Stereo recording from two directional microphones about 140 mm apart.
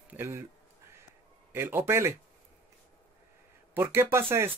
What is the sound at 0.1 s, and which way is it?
Speech, 15° right (ahead or behind).